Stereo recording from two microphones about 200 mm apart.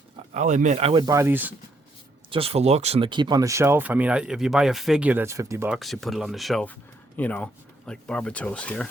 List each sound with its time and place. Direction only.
0.3 s speech: 35° right (ahead or behind)
1.0 s speech: 15° right (ahead or behind)
2.3 s speech: 30° right (ahead or behind); by 8.9 s 5° left (ahead or behind)